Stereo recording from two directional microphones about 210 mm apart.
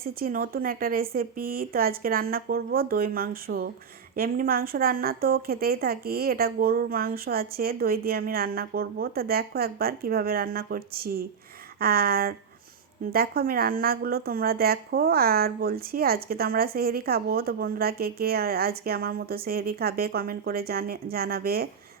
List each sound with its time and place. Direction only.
0.0 s speech: 45° right (ahead or behind)